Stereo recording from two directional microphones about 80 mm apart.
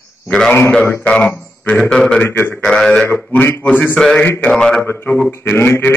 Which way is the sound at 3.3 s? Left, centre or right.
Left.